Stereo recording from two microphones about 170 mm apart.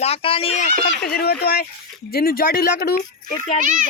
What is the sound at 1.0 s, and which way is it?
Speech, 65° left (ahead or behind).